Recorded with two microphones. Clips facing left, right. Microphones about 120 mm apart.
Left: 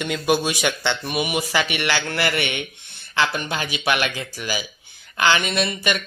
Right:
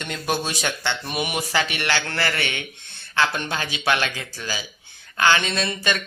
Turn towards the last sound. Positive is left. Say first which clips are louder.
# left 2 dB
turn(degrees=10)  # may be behind; listen again after turning